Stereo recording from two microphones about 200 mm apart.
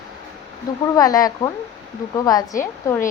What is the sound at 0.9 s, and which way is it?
A woman's voice, 20° left (ahead or behind).